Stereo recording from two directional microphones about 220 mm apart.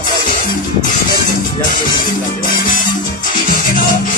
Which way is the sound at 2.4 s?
35° left (ahead or behind).